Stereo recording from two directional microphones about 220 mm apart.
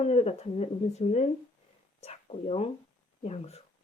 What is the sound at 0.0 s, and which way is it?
Speech, 25° left (ahead or behind).